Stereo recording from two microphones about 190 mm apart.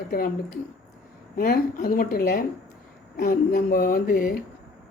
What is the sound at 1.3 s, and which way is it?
A woman's voice, 55° left (ahead or behind).